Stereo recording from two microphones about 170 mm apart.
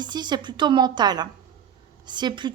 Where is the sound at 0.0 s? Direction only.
25° right (ahead or behind).